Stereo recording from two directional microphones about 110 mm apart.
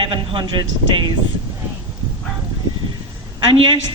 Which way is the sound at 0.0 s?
50° right (ahead or behind).